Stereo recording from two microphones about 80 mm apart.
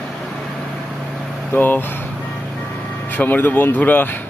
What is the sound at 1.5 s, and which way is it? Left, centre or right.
Speech, left.